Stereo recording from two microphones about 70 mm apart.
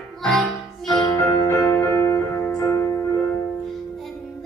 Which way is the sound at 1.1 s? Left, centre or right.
Left.